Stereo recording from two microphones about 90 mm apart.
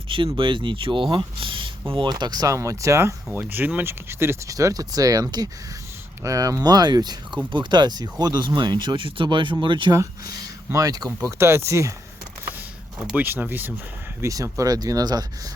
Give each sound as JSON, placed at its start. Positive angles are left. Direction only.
{"t": 0.3, "sound": "speech", "side_deg": -65}
{"t": 2.0, "sound": "speech", "side_deg": -50}
{"t": 2.6, "sound": "speech", "side_deg": -35}
{"t": 3.3, "sound": "speech", "side_deg": -20}
{"t": 10.7, "sound": "speech", "side_deg": -40}
{"t": 11.3, "sound": "speech", "side_deg": -30}
{"t": 13.1, "sound": "speech", "side_deg": -20}
{"t": 14.2, "sound": "speech", "side_deg": -35}